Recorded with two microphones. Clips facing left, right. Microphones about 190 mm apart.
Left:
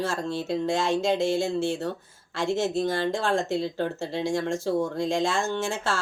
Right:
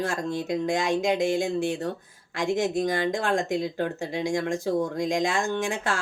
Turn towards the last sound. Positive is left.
turn(degrees=-15)  # may be behind; listen again after turning